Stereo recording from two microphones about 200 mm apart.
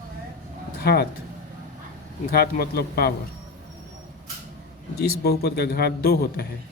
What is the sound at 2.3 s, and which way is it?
Speech, 50° left (ahead or behind).